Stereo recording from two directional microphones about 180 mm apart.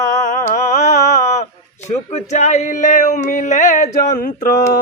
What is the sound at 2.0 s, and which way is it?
Speech, 40° left (ahead or behind).